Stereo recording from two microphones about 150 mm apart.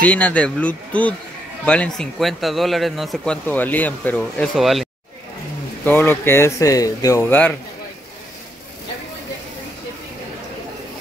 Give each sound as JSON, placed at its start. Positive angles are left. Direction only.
{"t": 0.0, "sound": "speech", "side_deg": 10}
{"t": 3.4, "sound": "speech", "side_deg": 10}
{"t": 5.9, "sound": "speech", "side_deg": 15}